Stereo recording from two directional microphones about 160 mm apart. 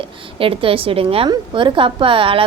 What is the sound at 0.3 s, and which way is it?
A woman's voice, 35° right (ahead or behind).